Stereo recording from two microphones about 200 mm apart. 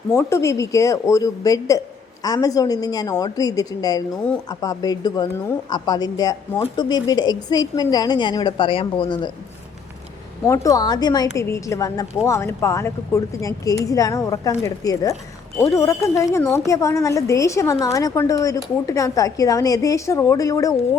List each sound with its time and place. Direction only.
0.1 s a woman's voice: 15° left (ahead or behind)
10.4 s a woman's voice: 15° left (ahead or behind)